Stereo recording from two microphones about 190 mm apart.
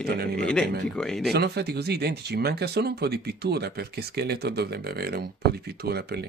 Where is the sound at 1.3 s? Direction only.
60° right (ahead or behind).